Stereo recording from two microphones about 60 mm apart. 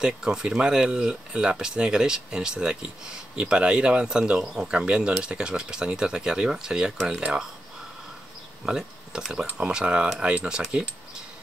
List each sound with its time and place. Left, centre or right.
0.0 s speech: centre
8.6 s speech: centre